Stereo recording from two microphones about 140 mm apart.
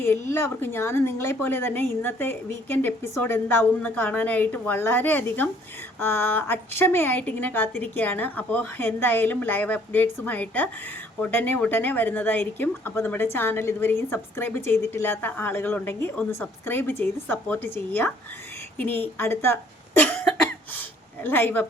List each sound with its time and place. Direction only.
0.0 s speech: 15° left (ahead or behind)
20.0 s cough: 5° left (ahead or behind)
21.2 s speech: 15° left (ahead or behind)